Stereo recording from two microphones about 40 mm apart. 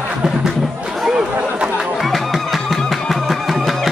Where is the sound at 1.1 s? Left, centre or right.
Right.